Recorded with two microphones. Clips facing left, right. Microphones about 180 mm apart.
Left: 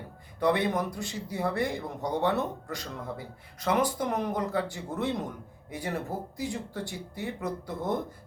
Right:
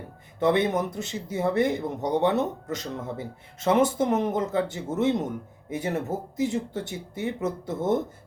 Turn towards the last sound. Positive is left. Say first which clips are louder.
# right 6 dB
turn(degrees=-20)  # may be behind; listen again after turning